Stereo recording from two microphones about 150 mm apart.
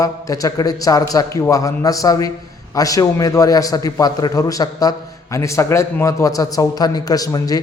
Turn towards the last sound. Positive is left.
turn(degrees=25)  # may be behind; listen again after turning